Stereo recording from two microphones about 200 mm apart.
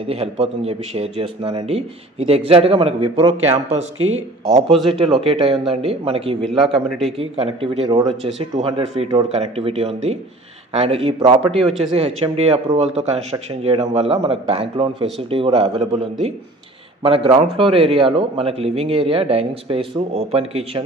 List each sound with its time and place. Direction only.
0.0 s a man's voice: 30° right (ahead or behind)
6.4 s a man's voice: centre (ahead or behind)
7.2 s a man's voice: 30° right (ahead or behind)